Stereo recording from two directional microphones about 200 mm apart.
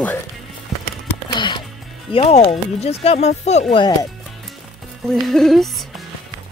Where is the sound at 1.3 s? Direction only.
25° left (ahead or behind).